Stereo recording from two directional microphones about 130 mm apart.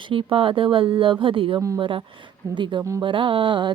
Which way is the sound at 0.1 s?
45° right (ahead or behind).